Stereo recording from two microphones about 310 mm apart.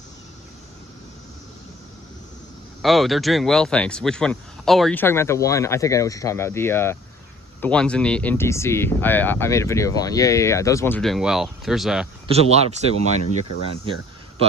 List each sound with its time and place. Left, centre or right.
2.8 s speech: centre
12.3 s speech: centre